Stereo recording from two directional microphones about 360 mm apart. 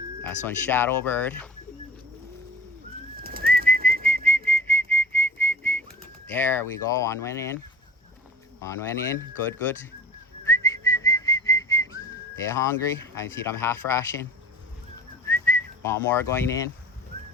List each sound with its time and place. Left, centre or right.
0.2 s speech: centre
3.2 s bird: right
4.2 s whistling: centre
6.3 s speech: centre
8.6 s speech: centre
10.4 s whistling: centre
12.5 s speech: centre
15.3 s whistling: centre